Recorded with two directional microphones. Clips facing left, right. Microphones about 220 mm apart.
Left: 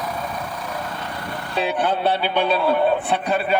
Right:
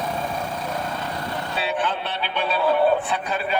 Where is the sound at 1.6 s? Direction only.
55° left (ahead or behind).